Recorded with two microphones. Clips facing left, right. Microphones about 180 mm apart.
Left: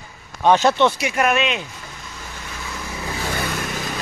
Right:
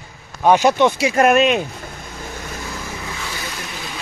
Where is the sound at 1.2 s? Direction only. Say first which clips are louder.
Right 7 dB; 45° right (ahead or behind).